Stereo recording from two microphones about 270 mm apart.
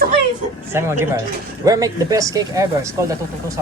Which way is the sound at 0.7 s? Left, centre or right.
Centre.